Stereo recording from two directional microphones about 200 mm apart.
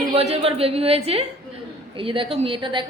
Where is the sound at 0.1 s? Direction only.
30° right (ahead or behind).